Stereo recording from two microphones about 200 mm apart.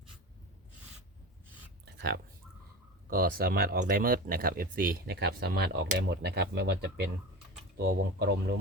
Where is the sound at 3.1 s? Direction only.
45° right (ahead or behind).